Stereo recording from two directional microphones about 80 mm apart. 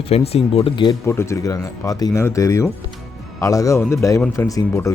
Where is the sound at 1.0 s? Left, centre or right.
Left.